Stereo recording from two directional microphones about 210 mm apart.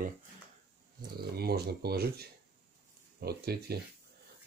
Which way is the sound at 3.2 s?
50° right (ahead or behind).